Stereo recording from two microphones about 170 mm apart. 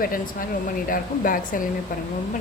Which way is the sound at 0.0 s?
55° left (ahead or behind).